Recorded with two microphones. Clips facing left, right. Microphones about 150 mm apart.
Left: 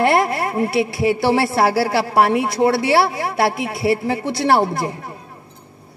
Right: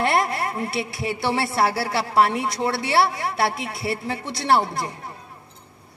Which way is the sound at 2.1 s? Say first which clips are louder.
Left 4 dB; 60° left (ahead or behind).